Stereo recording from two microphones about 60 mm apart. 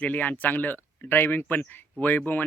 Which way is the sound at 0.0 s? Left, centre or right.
Left.